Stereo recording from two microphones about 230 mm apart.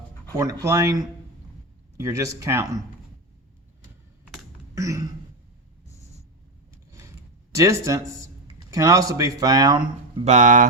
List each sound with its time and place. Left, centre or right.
0.6 s speech: centre
4.7 s throat clearing: centre
7.5 s speech: centre
10.2 s speech: right